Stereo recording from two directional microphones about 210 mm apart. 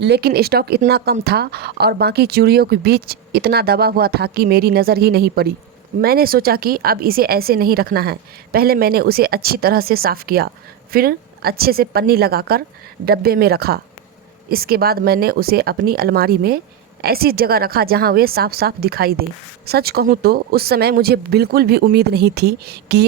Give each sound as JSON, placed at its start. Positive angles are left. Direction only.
{"t": 0.0, "sound": "speech", "side_deg": -50}